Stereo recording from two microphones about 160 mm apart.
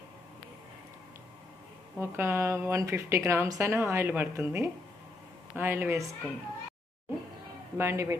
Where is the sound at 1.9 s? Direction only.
15° right (ahead or behind).